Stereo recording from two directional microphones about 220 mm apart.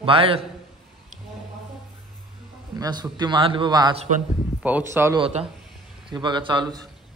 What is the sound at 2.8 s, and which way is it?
A man's voice, 20° right (ahead or behind).